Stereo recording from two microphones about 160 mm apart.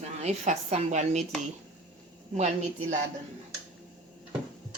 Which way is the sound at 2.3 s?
45° right (ahead or behind).